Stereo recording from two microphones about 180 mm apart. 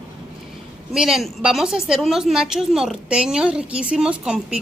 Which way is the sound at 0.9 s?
Centre (ahead or behind).